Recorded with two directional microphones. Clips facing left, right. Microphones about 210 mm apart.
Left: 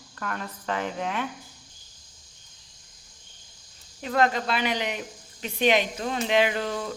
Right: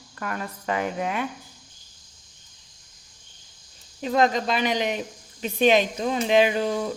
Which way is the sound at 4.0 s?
20° right (ahead or behind).